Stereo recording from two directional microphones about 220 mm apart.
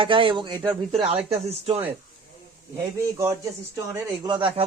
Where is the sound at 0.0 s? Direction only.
25° right (ahead or behind).